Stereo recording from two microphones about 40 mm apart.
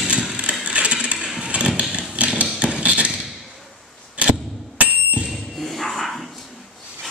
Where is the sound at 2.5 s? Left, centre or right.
Right.